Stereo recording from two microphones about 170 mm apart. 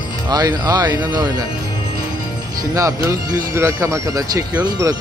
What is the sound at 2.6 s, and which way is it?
Speech, 20° right (ahead or behind).